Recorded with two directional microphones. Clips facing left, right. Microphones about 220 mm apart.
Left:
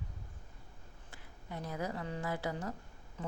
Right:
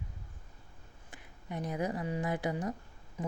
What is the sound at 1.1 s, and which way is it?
A woman's voice, 20° right (ahead or behind).